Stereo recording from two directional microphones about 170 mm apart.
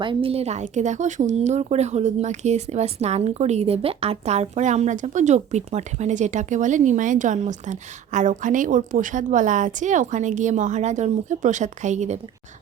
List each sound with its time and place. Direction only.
0.0 s speech: 30° right (ahead or behind)